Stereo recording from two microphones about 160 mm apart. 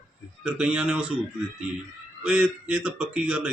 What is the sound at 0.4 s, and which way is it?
Speech, 5° right (ahead or behind).